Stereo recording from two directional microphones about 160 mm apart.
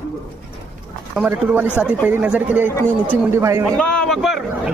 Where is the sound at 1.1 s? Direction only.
10° right (ahead or behind).